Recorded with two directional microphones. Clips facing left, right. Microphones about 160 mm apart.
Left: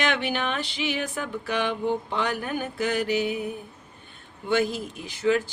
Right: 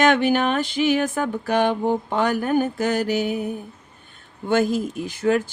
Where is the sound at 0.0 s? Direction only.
45° right (ahead or behind).